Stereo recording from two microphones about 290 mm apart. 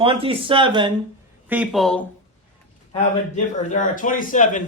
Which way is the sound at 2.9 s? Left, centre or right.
Left.